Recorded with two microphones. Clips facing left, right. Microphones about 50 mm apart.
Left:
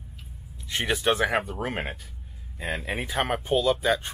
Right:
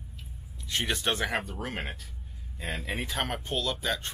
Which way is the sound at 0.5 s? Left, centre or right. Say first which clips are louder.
Left 3 dB; centre.